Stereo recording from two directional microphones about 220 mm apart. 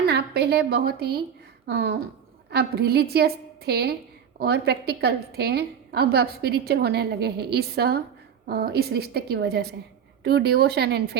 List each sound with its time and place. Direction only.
0.0 s a woman's voice: 50° right (ahead or behind)